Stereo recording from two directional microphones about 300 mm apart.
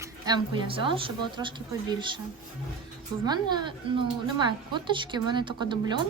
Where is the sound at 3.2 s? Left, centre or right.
Centre.